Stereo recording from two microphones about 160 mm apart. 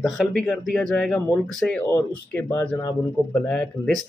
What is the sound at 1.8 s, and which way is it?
Speech, 20° left (ahead or behind).